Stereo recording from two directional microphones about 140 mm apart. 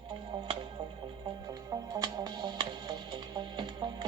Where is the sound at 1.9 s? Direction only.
25° right (ahead or behind).